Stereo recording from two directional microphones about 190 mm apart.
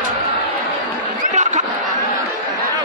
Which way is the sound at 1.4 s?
40° right (ahead or behind).